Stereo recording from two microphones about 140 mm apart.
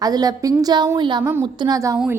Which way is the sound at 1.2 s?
20° right (ahead or behind).